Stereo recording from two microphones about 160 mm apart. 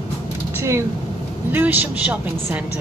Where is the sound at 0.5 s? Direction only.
15° right (ahead or behind).